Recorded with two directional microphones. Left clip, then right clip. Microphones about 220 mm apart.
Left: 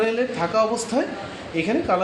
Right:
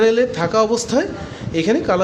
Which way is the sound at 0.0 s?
50° right (ahead or behind).